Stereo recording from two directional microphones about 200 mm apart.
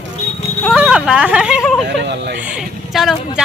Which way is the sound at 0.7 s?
5° right (ahead or behind).